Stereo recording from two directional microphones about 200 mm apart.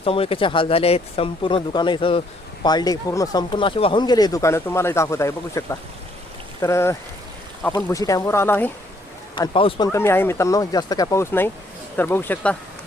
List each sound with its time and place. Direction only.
0.0 s speech: 25° left (ahead or behind); by 8.7 s 10° left (ahead or behind)
9.3 s speech: 25° left (ahead or behind); by 12.5 s 10° left (ahead or behind)